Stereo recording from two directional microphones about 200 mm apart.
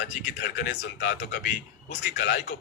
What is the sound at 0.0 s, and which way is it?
Speech, 50° left (ahead or behind).